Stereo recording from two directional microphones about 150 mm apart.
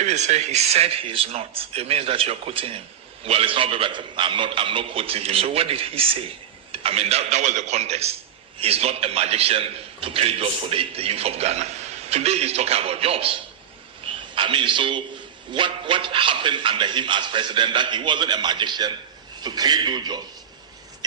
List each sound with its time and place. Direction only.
0.0 s a man's voice: 50° right (ahead or behind); by 20.2 s 30° right (ahead or behind)